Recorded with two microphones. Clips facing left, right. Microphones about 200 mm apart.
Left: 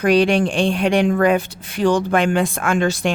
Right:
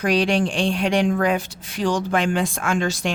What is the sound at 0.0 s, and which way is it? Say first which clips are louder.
Speech: left 4 dB; 55° left (ahead or behind).